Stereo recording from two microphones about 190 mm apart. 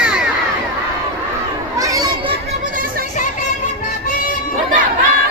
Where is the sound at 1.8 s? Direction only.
15° right (ahead or behind).